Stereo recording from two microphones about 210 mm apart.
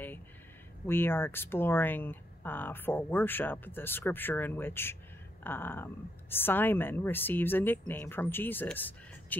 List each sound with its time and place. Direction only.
0.8 s speech: 10° left (ahead or behind)